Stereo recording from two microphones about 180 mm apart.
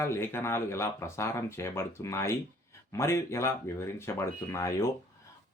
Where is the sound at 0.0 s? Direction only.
15° left (ahead or behind).